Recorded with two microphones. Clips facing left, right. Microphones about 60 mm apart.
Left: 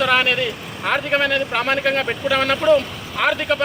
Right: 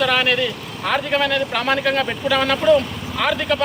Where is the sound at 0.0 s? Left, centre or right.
Left.